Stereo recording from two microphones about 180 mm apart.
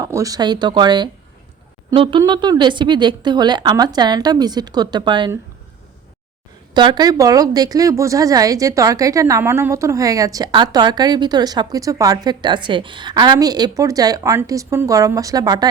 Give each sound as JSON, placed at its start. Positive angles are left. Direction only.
{"t": 0.0, "sound": "a woman's voice", "side_deg": -20}
{"t": 6.7, "sound": "a woman's voice", "side_deg": -25}